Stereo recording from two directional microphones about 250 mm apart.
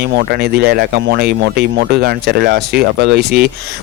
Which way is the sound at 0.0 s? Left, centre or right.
Right.